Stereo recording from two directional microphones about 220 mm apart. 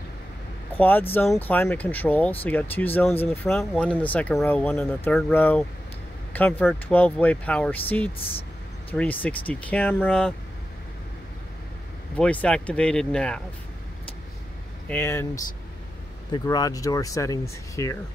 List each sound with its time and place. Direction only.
0.7 s speech: 10° left (ahead or behind)
12.2 s speech: 5° left (ahead or behind)
14.9 s speech: 10° left (ahead or behind)